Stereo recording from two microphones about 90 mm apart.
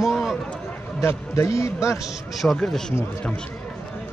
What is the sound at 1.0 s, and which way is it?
Speech, 30° left (ahead or behind).